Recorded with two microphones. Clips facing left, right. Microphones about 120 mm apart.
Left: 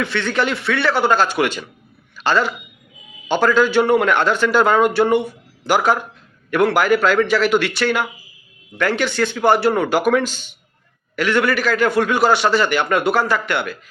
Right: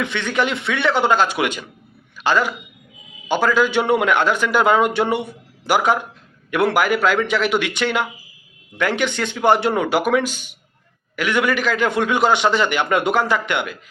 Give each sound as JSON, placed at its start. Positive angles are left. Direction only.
{"t": 0.0, "sound": "a man's voice", "side_deg": -15}